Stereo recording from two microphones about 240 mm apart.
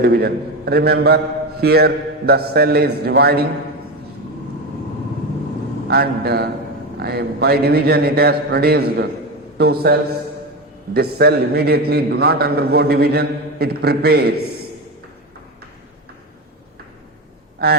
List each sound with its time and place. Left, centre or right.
0.0 s a man's voice: right
5.9 s a man's voice: right